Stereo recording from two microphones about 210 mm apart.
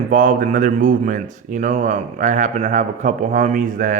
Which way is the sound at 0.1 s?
40° right (ahead or behind).